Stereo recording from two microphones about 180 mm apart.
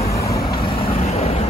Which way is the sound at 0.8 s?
35° left (ahead or behind).